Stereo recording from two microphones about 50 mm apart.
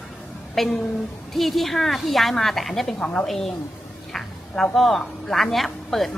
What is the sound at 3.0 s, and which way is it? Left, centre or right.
Speech, left.